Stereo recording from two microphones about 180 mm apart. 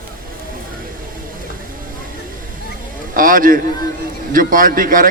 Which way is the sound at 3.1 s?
50° right (ahead or behind).